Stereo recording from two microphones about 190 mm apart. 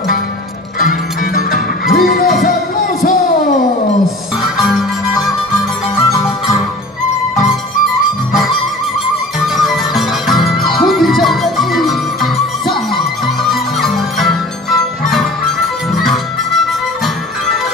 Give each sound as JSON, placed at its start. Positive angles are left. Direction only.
{"t": 0.7, "sound": "music", "side_deg": 50}
{"t": 4.4, "sound": "music", "side_deg": 0}
{"t": 5.9, "sound": "music", "side_deg": 15}
{"t": 9.4, "sound": "music", "side_deg": 0}